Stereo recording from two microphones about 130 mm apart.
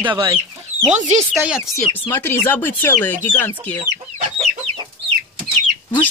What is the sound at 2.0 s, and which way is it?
Speech, 15° left (ahead or behind).